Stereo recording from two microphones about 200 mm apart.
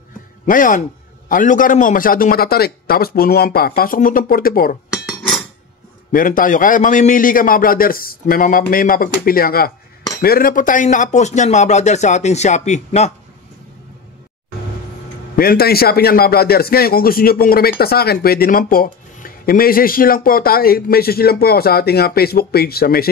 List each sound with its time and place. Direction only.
0.5 s a man's voice: 40° left (ahead or behind)
4.9 s chink: centre (ahead or behind)
6.1 s a man's voice: 40° left (ahead or behind)
15.3 s a man's voice: 50° left (ahead or behind)